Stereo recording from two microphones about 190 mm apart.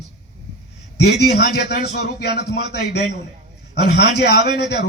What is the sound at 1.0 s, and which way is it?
A man's voice, 60° left (ahead or behind).